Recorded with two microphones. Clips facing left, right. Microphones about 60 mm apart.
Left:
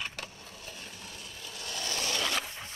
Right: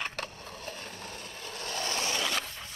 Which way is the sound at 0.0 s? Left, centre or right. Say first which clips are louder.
Right 3 dB; right.